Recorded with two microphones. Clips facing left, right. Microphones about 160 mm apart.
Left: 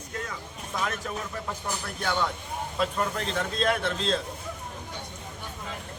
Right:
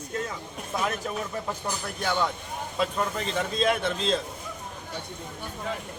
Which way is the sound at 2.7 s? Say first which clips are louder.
Right 1 dB; 5° right (ahead or behind).